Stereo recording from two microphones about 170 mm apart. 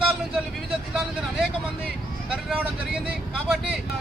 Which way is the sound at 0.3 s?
5° right (ahead or behind).